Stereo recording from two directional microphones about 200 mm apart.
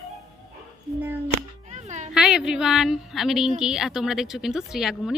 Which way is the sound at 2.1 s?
5° right (ahead or behind).